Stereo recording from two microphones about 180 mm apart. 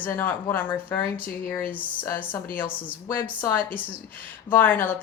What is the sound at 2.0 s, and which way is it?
Speech, 10° left (ahead or behind).